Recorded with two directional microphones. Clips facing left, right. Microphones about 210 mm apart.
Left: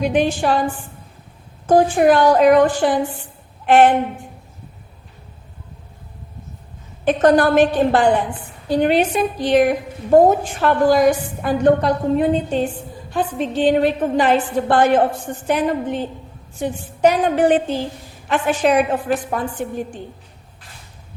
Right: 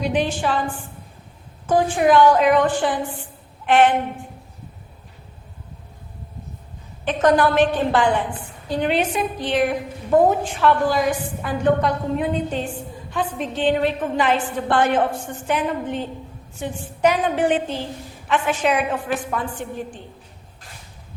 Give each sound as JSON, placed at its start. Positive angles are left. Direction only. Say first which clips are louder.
{"t": 0.0, "sound": "a woman's voice", "louder": "left 4 dB", "side_deg": 50}
{"t": 1.6, "sound": "a woman's voice", "louder": "left 4 dB", "side_deg": 40}
{"t": 7.0, "sound": "a woman's voice", "louder": "left 3 dB", "side_deg": 40}